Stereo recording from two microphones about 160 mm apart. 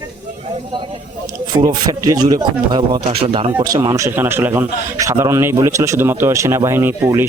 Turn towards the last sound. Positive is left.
turn(degrees=-15)  # may be behind; listen again after turning